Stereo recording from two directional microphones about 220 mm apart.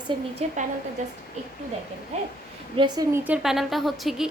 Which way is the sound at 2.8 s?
20° right (ahead or behind).